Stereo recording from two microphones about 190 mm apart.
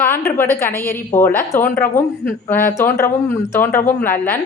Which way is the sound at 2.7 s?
15° left (ahead or behind).